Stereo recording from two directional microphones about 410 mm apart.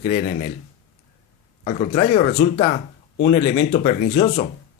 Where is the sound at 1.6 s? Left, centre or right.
Centre.